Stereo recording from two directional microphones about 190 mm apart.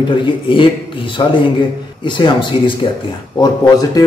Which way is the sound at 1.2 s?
25° left (ahead or behind).